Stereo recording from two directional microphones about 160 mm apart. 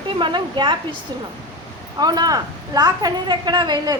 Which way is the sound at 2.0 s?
25° right (ahead or behind).